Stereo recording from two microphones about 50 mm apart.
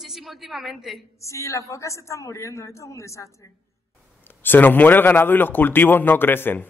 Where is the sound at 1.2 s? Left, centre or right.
Left.